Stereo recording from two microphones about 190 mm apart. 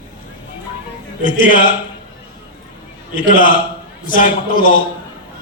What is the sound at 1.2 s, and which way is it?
Speech, 45° left (ahead or behind).